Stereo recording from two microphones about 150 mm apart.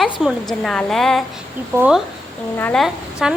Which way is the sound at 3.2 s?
5° right (ahead or behind).